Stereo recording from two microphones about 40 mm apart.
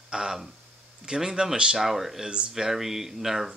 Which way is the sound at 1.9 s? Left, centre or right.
Centre.